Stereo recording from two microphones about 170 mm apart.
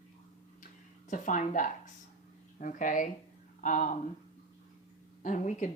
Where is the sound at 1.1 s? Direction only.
50° left (ahead or behind).